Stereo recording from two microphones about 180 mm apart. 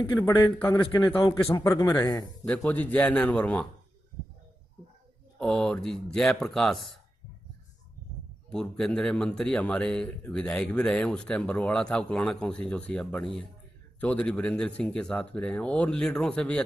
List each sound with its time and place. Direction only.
0.1 s a man's voice: 15° left (ahead or behind)
5.4 s a man's voice: 5° left (ahead or behind)
8.5 s a man's voice: 5° left (ahead or behind)